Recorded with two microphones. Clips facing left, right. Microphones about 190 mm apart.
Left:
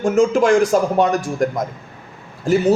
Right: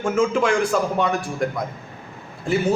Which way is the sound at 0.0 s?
40° left (ahead or behind).